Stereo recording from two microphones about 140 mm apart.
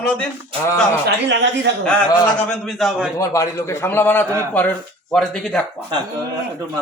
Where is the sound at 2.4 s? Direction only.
Centre (ahead or behind).